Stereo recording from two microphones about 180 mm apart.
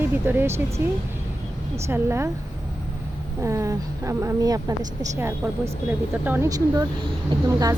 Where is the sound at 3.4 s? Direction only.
20° right (ahead or behind).